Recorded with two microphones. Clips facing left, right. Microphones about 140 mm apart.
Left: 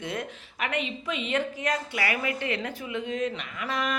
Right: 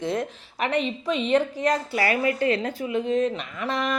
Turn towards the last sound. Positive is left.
turn(degrees=-30)  # may be behind; listen again after turning